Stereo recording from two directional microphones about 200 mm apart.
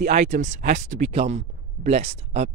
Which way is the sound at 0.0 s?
35° right (ahead or behind).